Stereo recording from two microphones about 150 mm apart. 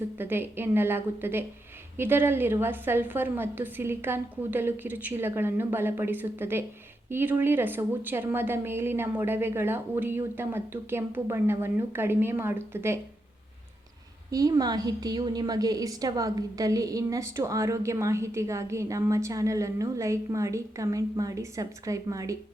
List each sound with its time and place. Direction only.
0.2 s a woman's voice: 15° right (ahead or behind)
14.3 s a woman's voice: 25° right (ahead or behind)